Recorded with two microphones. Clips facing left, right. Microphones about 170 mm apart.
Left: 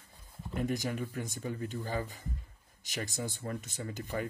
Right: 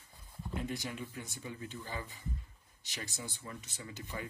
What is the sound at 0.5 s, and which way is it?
Speech, 45° left (ahead or behind).